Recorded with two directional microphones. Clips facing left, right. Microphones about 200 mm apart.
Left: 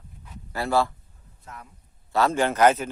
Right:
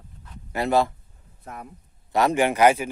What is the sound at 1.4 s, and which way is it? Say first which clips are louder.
Speech: right 5 dB; 55° right (ahead or behind).